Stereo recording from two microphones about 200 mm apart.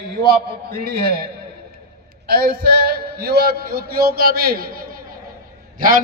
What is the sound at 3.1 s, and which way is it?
A man's voice, 50° right (ahead or behind).